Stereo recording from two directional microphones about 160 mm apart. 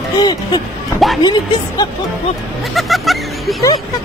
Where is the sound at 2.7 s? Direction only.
Centre (ahead or behind).